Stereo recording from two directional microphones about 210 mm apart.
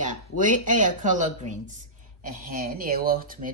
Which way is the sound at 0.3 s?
40° right (ahead or behind).